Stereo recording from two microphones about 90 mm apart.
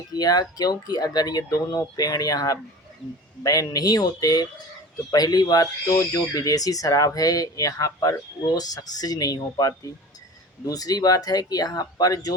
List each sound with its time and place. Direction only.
0.1 s speech: 45° left (ahead or behind)